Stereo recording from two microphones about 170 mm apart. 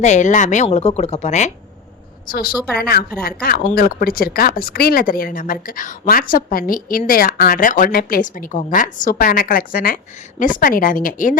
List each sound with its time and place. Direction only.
0.0 s a woman's voice: 45° left (ahead or behind)
2.2 s a woman's voice: 55° left (ahead or behind)